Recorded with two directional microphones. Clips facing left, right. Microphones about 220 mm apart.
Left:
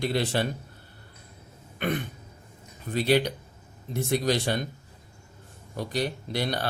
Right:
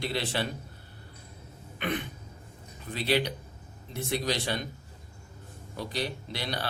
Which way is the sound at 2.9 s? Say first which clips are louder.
Left 5 dB; 50° left (ahead or behind).